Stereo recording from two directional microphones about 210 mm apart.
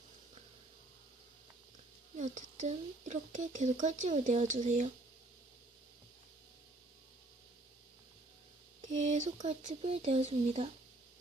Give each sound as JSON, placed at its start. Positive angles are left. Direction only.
{"t": 2.1, "sound": "speech", "side_deg": -35}
{"t": 8.8, "sound": "speech", "side_deg": -35}